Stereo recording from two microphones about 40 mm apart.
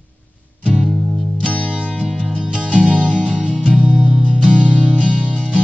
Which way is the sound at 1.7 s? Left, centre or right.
Right.